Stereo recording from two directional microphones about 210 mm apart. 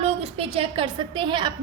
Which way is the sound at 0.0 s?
30° right (ahead or behind).